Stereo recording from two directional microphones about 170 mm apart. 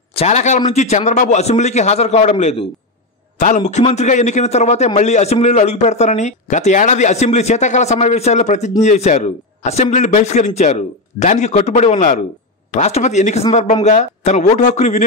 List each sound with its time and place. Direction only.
0.1 s a man's voice: 40° left (ahead or behind)